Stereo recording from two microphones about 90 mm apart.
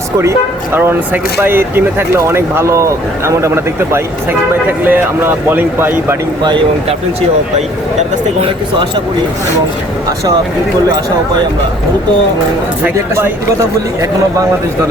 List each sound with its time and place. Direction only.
0.2 s speech: 25° right (ahead or behind)
6.4 s speech: 60° right (ahead or behind)
8.4 s speech: 90° right
13.1 s a man's voice: 30° right (ahead or behind)